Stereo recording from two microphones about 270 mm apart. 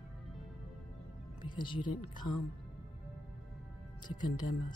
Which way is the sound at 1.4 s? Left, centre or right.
Centre.